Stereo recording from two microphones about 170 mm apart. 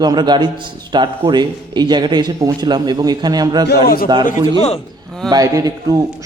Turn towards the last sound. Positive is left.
turn(degrees=-20)  # may be behind; listen again after turning